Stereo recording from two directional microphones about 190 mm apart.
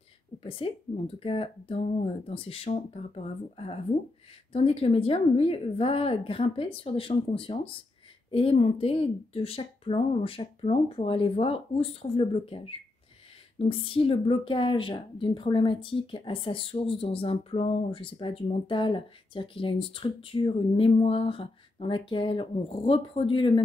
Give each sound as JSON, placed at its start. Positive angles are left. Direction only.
{"t": 0.4, "sound": "a woman's voice", "side_deg": 30}